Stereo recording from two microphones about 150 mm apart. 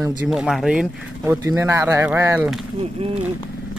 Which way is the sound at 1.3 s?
20° right (ahead or behind).